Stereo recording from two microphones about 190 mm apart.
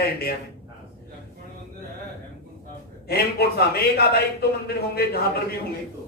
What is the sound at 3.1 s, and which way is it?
A man's voice, 55° left (ahead or behind).